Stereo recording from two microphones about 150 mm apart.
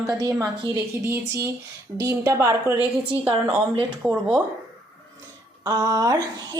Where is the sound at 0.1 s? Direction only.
25° right (ahead or behind).